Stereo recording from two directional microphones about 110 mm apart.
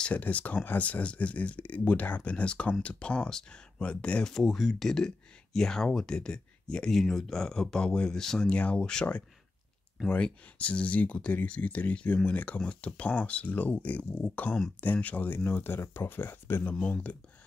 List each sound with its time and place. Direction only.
0.0 s speech: 15° left (ahead or behind)